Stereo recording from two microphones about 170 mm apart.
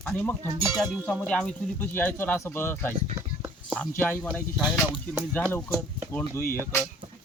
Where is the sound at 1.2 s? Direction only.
5° left (ahead or behind).